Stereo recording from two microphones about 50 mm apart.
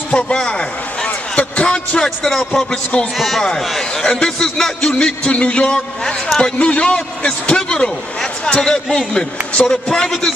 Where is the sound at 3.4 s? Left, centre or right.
Centre.